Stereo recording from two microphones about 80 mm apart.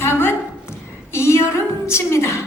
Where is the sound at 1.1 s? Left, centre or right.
Left.